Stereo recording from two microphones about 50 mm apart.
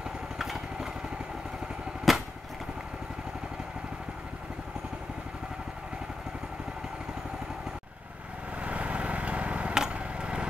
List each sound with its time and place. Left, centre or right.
2.1 s vehicle: centre
8.5 s vehicle: right